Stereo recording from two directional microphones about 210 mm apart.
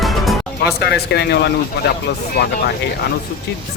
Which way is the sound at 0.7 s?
50° left (ahead or behind).